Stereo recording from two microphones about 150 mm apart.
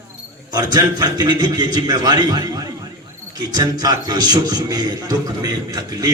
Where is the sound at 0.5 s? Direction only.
25° right (ahead or behind).